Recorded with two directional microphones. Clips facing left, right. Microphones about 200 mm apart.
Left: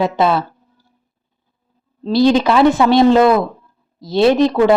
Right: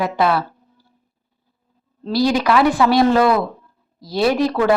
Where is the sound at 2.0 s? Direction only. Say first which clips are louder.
Left 4 dB; 25° left (ahead or behind).